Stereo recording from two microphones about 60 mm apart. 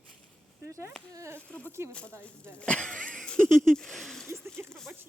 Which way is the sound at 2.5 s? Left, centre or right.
Centre.